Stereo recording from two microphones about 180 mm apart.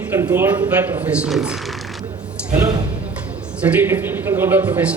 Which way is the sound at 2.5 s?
15° right (ahead or behind).